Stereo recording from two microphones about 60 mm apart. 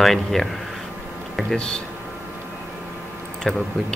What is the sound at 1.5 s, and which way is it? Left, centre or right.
Speech, centre.